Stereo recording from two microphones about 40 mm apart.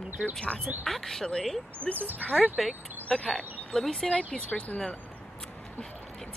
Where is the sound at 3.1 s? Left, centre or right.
Centre.